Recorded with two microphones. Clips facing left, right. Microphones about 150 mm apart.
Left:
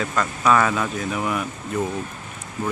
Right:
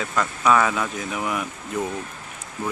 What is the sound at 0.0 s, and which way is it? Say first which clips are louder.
Speech: left 1 dB; 5° right (ahead or behind).